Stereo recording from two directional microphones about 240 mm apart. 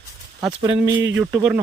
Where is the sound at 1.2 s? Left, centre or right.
Centre.